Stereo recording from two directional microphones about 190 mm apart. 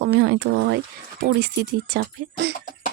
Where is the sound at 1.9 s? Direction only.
55° right (ahead or behind).